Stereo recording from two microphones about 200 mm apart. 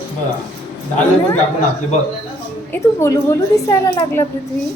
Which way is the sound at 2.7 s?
15° left (ahead or behind).